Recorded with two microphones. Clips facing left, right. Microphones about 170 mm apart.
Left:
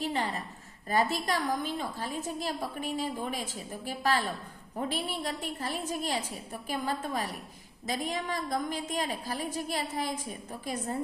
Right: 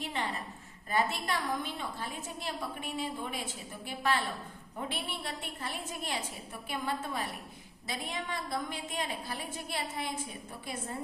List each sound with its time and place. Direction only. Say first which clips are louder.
0.0 s a woman's voice: left 4 dB; 40° left (ahead or behind)